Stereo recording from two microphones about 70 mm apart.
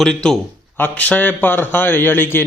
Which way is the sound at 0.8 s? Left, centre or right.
Left.